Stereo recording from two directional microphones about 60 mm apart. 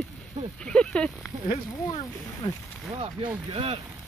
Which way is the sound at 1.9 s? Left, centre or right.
Left.